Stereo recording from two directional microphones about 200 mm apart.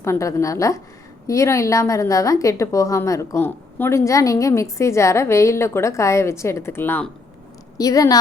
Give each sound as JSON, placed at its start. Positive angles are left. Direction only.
{"t": 0.0, "sound": "a woman's voice", "side_deg": 15}